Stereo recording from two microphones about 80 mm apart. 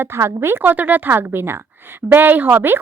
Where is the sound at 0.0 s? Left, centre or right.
Right.